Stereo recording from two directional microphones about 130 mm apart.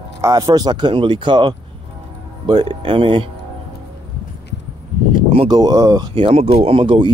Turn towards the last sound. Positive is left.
turn(degrees=-40)  # may be behind; listen again after turning